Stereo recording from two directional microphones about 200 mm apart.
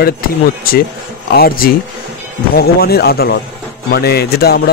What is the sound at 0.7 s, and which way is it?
Speech, 45° left (ahead or behind).